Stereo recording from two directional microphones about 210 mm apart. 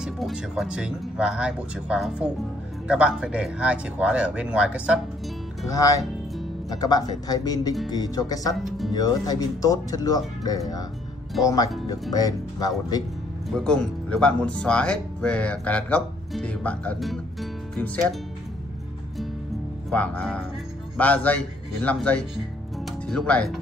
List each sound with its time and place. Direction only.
0.0 s speech: centre (ahead or behind)
5.7 s speech: 15° left (ahead or behind)
8.5 s speech: centre (ahead or behind)
8.9 s speech: 15° left (ahead or behind)
13.5 s speech: 5° left (ahead or behind)
19.9 s speech: 5° left (ahead or behind)